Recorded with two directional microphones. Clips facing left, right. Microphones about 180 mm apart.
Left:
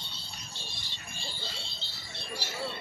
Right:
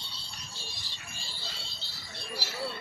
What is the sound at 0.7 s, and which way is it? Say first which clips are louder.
Music: left 1 dB; 35° right (ahead or behind).